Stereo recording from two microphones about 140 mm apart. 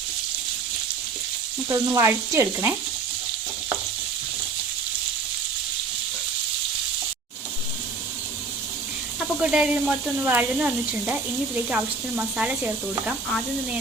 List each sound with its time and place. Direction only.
1.7 s frying: 20° right (ahead or behind)
9.4 s speech: 5° right (ahead or behind)